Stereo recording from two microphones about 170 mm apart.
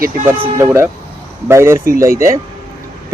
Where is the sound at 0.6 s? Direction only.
15° right (ahead or behind).